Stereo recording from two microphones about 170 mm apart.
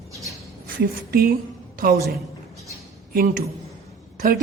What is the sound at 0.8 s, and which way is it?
Speech, 60° right (ahead or behind).